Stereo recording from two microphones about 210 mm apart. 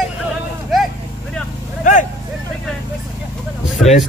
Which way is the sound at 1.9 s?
40° left (ahead or behind).